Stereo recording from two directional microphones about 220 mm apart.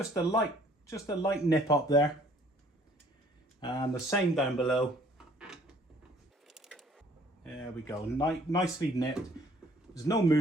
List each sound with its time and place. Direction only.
0.1 s speech: 15° left (ahead or behind)
3.6 s speech: 20° left (ahead or behind)
4.1 s a sound: centre (ahead or behind)
7.9 s speech: 15° left (ahead or behind)